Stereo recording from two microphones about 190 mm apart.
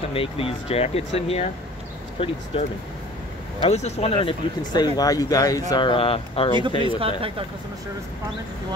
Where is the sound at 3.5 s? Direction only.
35° left (ahead or behind).